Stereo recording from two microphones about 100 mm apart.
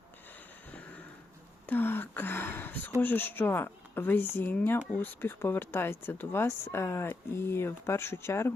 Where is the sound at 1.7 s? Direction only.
20° left (ahead or behind).